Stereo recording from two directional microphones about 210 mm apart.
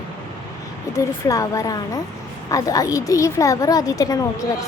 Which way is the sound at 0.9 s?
15° left (ahead or behind).